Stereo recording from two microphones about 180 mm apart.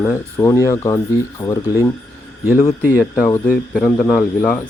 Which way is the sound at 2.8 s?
10° left (ahead or behind).